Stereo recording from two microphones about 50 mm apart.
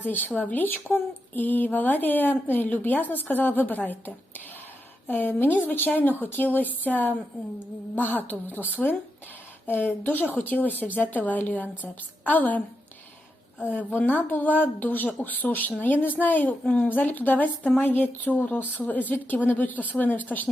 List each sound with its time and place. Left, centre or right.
0.0 s a woman's voice: left
14.0 s speech: left